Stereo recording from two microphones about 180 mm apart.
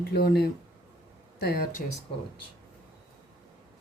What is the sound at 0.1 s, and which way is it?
Speech, 60° left (ahead or behind).